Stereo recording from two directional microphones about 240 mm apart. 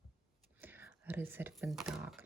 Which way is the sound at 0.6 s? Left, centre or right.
Centre.